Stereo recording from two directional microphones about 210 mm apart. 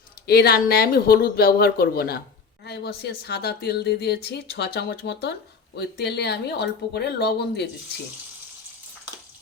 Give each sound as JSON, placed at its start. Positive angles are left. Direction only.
{"t": 0.3, "sound": "speech", "side_deg": 50}